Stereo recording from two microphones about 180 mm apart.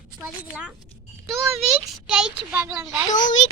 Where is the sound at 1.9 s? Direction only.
5° right (ahead or behind).